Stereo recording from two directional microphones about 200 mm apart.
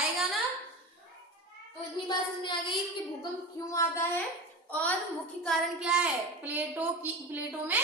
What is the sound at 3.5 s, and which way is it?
Speech, 15° left (ahead or behind).